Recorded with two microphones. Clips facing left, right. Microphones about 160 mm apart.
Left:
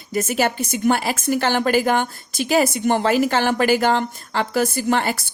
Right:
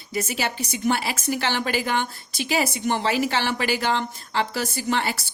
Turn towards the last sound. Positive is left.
turn(degrees=50)  # may be behind; listen again after turning